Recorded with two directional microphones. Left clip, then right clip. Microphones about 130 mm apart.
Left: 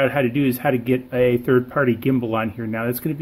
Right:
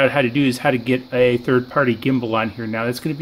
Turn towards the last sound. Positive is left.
turn(degrees=-5)  # may be behind; listen again after turning